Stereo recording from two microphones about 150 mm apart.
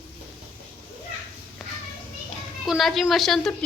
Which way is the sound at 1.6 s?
Centre (ahead or behind).